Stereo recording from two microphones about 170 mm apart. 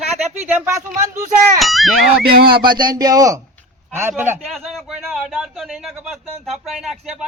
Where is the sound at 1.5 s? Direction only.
Centre (ahead or behind).